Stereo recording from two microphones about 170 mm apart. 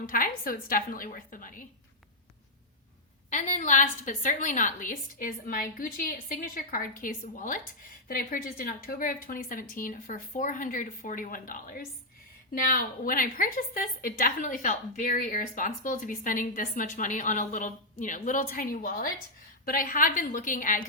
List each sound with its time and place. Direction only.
0.0 s a woman's voice: 55° left (ahead or behind)
3.2 s a woman's voice: 45° left (ahead or behind)